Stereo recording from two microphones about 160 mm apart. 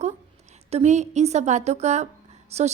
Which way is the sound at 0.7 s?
45° right (ahead or behind).